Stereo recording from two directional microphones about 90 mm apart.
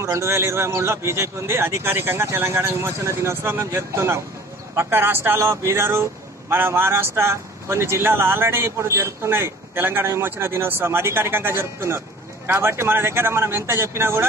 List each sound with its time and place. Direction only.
0.0 s speech: 30° right (ahead or behind)